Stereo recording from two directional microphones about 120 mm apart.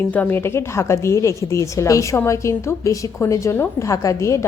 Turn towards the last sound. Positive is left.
turn(degrees=25)  # may be behind; listen again after turning